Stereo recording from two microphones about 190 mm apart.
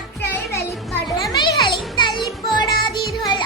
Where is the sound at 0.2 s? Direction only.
10° left (ahead or behind).